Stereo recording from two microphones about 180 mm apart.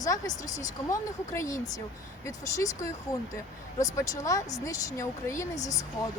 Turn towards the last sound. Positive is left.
turn(degrees=20)  # may be behind; listen again after turning